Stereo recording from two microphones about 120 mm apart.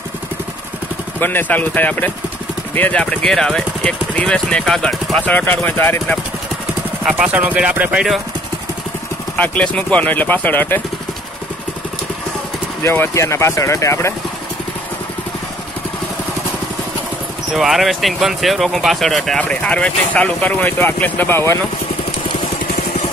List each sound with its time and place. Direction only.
1.2 s speech: 15° left (ahead or behind)
7.1 s speech: 10° right (ahead or behind)
9.4 s speech: 10° left (ahead or behind)
12.8 s speech: 20° left (ahead or behind)
17.6 s speech: centre (ahead or behind); by 21.5 s 20° left (ahead or behind)